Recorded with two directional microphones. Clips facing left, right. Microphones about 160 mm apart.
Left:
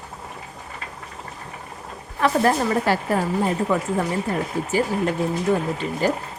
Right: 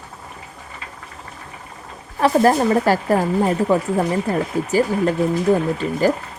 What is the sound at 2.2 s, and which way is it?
A woman's voice, 35° right (ahead or behind).